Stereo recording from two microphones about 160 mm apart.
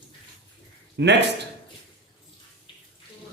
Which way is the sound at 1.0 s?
90° right.